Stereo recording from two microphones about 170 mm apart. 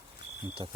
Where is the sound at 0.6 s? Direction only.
30° right (ahead or behind).